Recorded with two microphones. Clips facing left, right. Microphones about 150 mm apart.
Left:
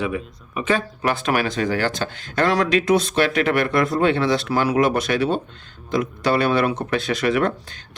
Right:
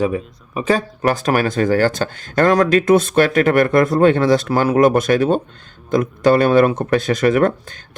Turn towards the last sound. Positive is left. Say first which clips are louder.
# right 5 dB
turn(degrees=-45)  # may be behind; listen again after turning